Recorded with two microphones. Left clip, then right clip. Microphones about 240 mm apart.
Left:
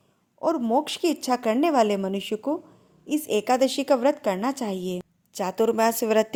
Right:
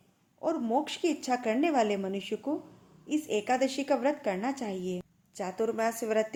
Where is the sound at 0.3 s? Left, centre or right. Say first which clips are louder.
Left 6 dB; left.